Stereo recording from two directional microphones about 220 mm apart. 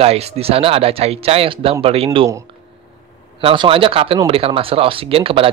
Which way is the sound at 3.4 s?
25° right (ahead or behind).